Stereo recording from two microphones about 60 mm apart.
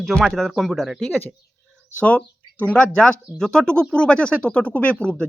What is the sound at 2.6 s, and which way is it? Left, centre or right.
Speech, left.